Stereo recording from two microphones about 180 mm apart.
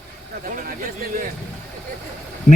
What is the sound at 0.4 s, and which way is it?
Speech, 50° right (ahead or behind).